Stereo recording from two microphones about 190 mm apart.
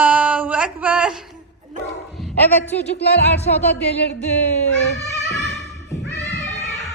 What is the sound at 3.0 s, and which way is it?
Music, 60° left (ahead or behind).